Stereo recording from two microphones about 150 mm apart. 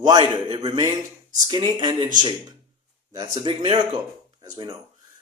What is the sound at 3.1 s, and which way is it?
A man's voice, 30° right (ahead or behind).